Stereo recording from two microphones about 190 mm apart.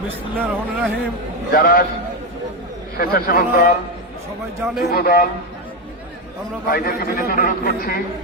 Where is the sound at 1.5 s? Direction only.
50° left (ahead or behind).